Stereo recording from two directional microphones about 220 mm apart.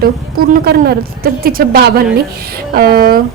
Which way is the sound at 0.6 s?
45° right (ahead or behind).